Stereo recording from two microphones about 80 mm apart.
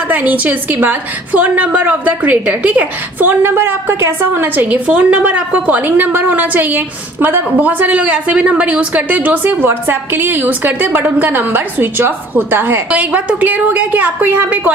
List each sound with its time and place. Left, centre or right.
0.1 s a woman's voice: centre